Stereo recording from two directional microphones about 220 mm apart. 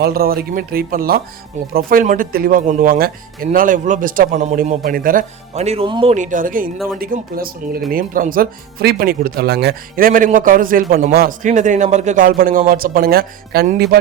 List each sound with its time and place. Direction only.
0.0 s speech: 45° right (ahead or behind)